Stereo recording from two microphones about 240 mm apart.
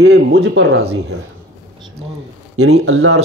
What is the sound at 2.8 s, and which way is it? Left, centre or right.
Speech, right.